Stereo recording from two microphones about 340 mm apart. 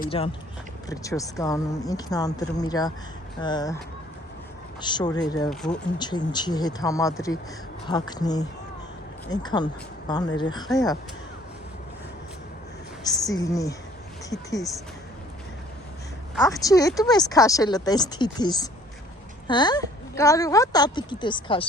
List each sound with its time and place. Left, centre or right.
0.0 s speech: centre
4.8 s speech: centre
13.2 s speech: centre
16.5 s speech: centre